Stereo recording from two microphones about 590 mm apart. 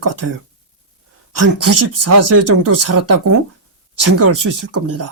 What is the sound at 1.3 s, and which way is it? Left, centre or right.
Speech, right.